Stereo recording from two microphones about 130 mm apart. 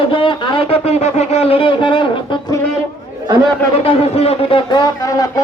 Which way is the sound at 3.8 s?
45° left (ahead or behind).